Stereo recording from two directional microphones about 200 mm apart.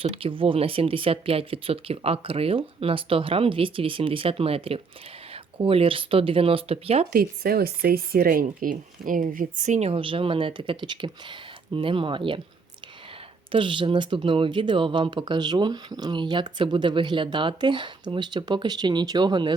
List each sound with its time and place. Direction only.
0.0 s speech: 30° right (ahead or behind)
7.1 s speech: 50° right (ahead or behind); by 12.4 s 25° right (ahead or behind)
13.5 s speech: 25° right (ahead or behind)